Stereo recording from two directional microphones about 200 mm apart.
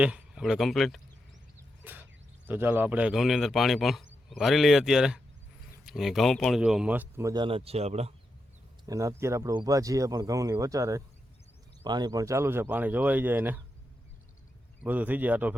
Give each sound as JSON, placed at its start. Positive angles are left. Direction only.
{"t": 0.0, "sound": "speech", "side_deg": -5}
{"t": 1.8, "sound": "a sound", "side_deg": -10}
{"t": 2.5, "sound": "a man's voice", "side_deg": -10}
{"t": 8.9, "sound": "speech", "side_deg": -15}
{"t": 14.8, "sound": "speech", "side_deg": -10}